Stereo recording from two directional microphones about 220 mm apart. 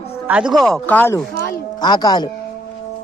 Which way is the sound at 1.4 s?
40° left (ahead or behind).